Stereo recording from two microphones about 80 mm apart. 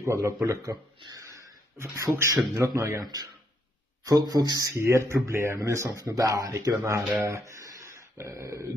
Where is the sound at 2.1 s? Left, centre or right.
Right.